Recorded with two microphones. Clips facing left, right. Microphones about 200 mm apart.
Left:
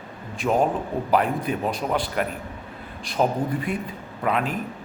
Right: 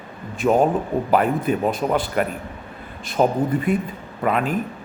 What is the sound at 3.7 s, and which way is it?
Speech, 5° right (ahead or behind).